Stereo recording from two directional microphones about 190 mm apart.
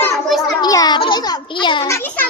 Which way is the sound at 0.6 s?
20° left (ahead or behind).